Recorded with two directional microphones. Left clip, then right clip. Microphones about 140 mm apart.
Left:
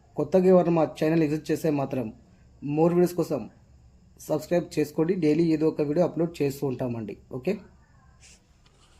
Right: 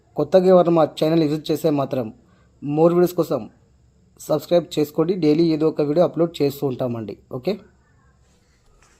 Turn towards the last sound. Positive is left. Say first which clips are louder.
# right 5 dB
turn(degrees=-30)  # may be behind; listen again after turning